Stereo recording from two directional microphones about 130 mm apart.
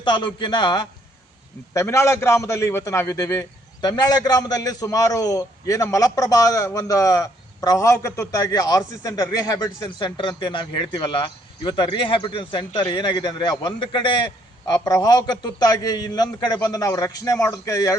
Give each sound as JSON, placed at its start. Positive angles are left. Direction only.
{"t": 0.0, "sound": "speech", "side_deg": 35}
{"t": 1.7, "sound": "a man's voice", "side_deg": 20}
{"t": 10.0, "sound": "speech", "side_deg": 40}